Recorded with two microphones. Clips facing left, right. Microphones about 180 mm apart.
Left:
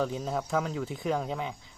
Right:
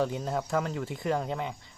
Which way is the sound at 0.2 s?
Centre (ahead or behind).